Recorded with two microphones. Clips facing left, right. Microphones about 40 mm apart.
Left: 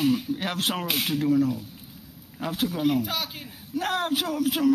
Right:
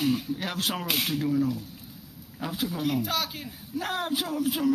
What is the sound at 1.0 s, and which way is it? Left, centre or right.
Speech, centre.